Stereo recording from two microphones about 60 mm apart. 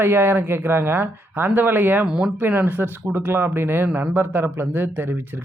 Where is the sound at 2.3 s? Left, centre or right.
Right.